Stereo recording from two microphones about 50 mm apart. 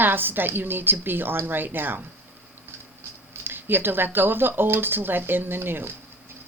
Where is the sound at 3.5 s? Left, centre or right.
Right.